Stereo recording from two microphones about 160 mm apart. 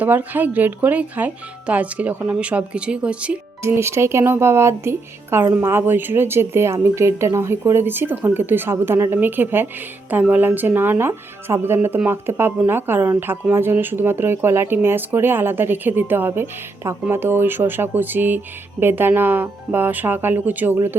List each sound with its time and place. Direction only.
0.0 s speech: 10° right (ahead or behind)